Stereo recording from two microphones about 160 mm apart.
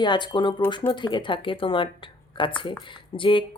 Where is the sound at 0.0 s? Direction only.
30° left (ahead or behind).